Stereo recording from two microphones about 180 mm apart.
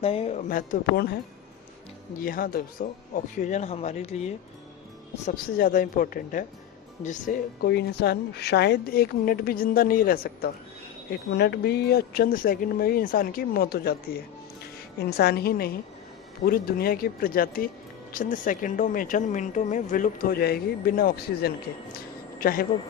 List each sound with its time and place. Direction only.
0.0 s speech: 35° left (ahead or behind); by 1.0 s 50° left (ahead or behind)
2.2 s speech: 55° left (ahead or behind); by 4.3 s 40° left (ahead or behind)
5.2 s speech: 50° left (ahead or behind)
7.7 s speech: 65° left (ahead or behind)
15.2 s speech: 60° left (ahead or behind)
21.9 s a sound: 55° left (ahead or behind)